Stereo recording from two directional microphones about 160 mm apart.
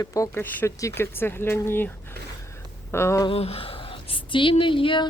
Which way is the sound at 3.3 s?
40° left (ahead or behind).